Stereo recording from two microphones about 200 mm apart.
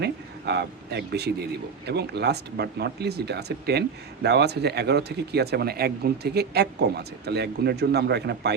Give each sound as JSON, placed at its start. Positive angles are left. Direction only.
{"t": 0.0, "sound": "speech", "side_deg": -55}